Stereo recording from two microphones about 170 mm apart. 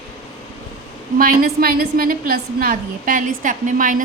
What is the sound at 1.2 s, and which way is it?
A woman's voice, 60° right (ahead or behind).